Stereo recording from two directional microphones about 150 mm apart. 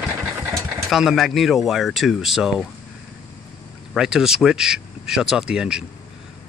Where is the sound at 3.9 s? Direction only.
5° right (ahead or behind).